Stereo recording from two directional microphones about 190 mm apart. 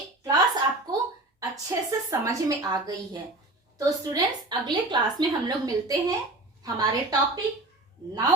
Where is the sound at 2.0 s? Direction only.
15° right (ahead or behind).